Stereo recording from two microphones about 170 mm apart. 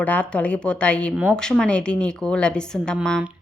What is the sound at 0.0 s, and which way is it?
A woman's voice, 10° left (ahead or behind).